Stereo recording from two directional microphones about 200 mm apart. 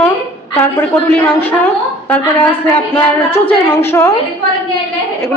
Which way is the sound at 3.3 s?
30° left (ahead or behind).